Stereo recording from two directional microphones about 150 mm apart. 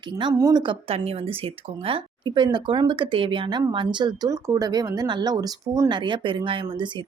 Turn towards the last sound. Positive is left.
turn(degrees=-30)  # may be behind; listen again after turning